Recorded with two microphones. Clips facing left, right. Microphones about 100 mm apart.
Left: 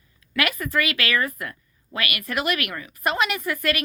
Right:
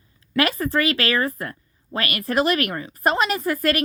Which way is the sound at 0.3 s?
30° right (ahead or behind).